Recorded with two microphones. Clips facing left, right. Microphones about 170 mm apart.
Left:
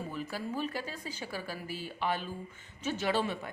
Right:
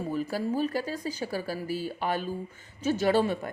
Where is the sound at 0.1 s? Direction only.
40° right (ahead or behind).